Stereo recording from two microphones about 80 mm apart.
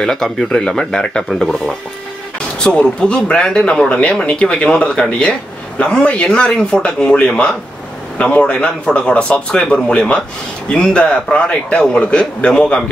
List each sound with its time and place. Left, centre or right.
0.0 s a man's voice: centre
2.6 s a man's voice: centre